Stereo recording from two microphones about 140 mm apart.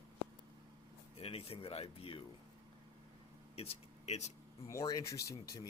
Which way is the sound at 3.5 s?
45° left (ahead or behind).